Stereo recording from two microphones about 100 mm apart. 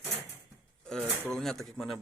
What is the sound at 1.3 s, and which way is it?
Speech, 5° left (ahead or behind).